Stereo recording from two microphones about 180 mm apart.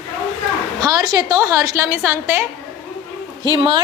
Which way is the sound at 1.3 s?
20° right (ahead or behind).